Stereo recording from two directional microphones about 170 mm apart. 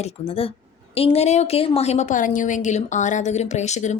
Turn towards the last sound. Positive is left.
turn(degrees=45)  # may be behind; listen again after turning